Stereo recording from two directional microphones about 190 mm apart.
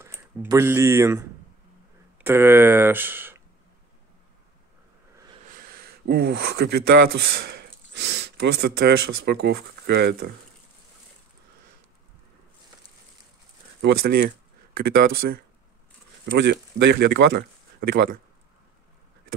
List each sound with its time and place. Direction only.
0.0 s speech: 10° right (ahead or behind)
5.5 s speech: 50° right (ahead or behind)
13.7 s speech: 60° right (ahead or behind)
16.3 s speech: 60° right (ahead or behind)